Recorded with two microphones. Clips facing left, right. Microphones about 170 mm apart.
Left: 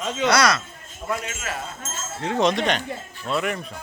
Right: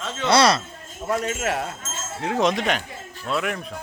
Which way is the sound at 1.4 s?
65° right (ahead or behind).